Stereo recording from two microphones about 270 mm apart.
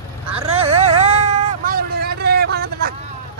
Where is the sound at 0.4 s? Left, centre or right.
Right.